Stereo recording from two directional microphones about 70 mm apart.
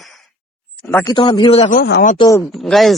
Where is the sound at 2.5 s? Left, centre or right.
Centre.